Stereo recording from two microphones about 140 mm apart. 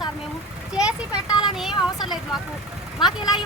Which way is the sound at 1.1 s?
30° left (ahead or behind).